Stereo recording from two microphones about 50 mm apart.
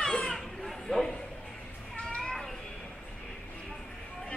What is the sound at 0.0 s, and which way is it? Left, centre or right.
Chatter, centre.